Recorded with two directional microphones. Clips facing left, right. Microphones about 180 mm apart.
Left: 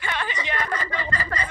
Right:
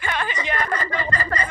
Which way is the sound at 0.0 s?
50° right (ahead or behind).